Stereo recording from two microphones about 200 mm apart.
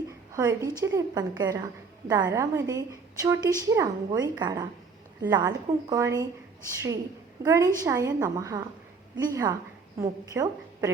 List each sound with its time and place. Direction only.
0.3 s a woman's voice: 15° right (ahead or behind)
7.4 s a woman's voice: 15° right (ahead or behind)